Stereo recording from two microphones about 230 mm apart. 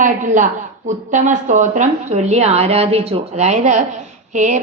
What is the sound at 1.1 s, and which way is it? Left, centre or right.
A woman's voice, right.